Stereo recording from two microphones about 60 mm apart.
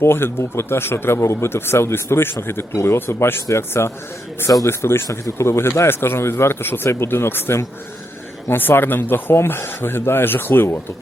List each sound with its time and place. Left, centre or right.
0.0 s a man's voice: left